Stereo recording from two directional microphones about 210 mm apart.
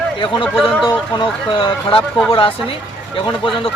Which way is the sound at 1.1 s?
20° left (ahead or behind).